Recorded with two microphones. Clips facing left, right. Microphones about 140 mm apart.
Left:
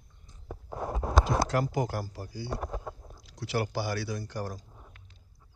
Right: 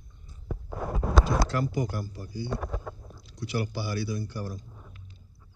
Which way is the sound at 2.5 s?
20° left (ahead or behind).